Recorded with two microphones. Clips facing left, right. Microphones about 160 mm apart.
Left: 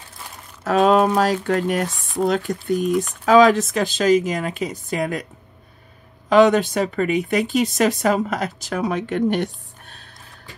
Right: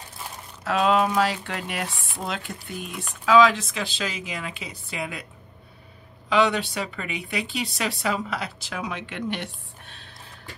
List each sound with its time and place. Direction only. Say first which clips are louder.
0.7 s speech: left 6 dB; 45° left (ahead or behind)
6.2 s speech: left 8 dB; 45° left (ahead or behind)